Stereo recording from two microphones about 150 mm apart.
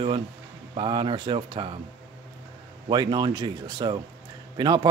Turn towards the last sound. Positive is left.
turn(degrees=-30)  # may be behind; listen again after turning